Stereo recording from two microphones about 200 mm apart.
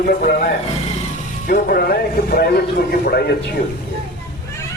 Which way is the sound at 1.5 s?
45° left (ahead or behind).